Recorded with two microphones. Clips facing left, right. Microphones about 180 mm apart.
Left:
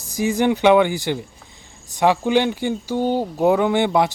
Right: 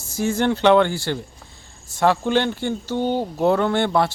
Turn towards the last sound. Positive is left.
turn(degrees=15)  # may be behind; listen again after turning